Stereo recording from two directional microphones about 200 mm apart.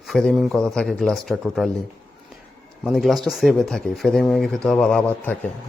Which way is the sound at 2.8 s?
Centre (ahead or behind).